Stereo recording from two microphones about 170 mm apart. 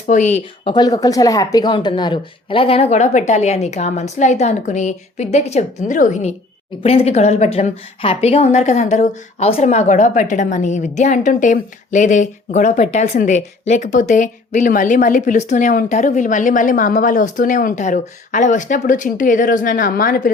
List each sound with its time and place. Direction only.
0.1 s a woman's voice: 45° left (ahead or behind)
0.7 s a woman's voice: 25° left (ahead or behind); by 20.3 s 55° left (ahead or behind)